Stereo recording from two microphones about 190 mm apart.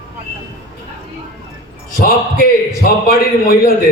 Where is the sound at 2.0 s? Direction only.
50° left (ahead or behind).